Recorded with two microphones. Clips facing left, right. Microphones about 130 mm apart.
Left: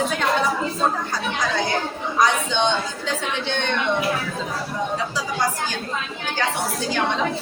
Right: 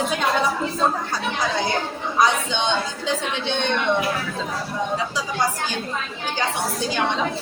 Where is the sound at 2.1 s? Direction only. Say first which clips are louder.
Even; 15° right (ahead or behind).